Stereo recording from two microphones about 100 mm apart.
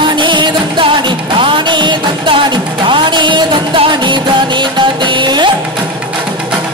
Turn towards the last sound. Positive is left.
turn(degrees=-50)  # may be behind; listen again after turning